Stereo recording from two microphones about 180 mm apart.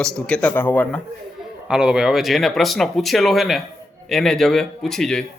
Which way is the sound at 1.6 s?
5° right (ahead or behind).